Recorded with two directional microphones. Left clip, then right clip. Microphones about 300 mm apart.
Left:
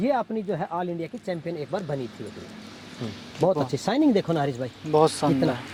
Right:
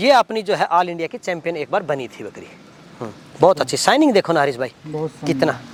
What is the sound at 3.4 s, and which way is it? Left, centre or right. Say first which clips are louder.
Speech: right 9 dB; centre.